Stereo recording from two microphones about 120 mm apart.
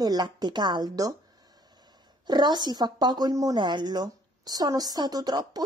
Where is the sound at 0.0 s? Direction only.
35° right (ahead or behind).